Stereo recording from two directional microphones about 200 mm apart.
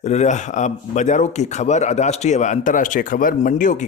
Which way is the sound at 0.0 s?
35° left (ahead or behind).